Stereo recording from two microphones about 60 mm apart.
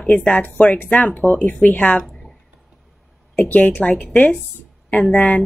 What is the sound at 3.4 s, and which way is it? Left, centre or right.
Speech, left.